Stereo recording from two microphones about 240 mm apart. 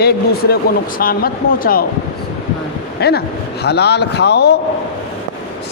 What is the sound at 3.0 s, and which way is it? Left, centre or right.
Speech, left.